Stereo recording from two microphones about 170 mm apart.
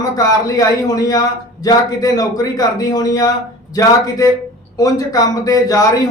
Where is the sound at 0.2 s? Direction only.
20° left (ahead or behind).